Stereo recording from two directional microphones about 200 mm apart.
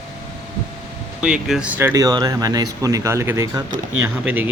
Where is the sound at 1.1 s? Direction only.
5° right (ahead or behind).